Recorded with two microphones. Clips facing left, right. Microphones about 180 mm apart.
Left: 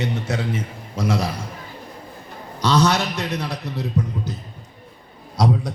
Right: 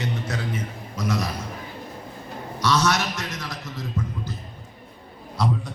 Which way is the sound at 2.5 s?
30° left (ahead or behind).